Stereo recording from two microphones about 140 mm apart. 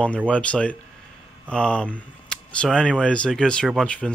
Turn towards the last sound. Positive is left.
turn(degrees=5)  # may be behind; listen again after turning